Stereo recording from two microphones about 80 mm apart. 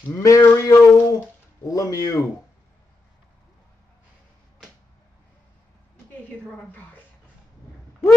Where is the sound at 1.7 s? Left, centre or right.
Left.